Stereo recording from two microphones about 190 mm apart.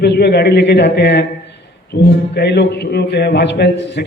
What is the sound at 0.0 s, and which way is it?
A man's voice, 60° left (ahead or behind).